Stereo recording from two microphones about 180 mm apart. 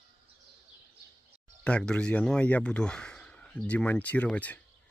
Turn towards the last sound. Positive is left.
turn(degrees=10)  # may be behind; listen again after turning